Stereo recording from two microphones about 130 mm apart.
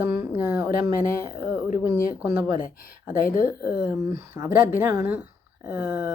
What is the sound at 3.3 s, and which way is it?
Speech, 90° left.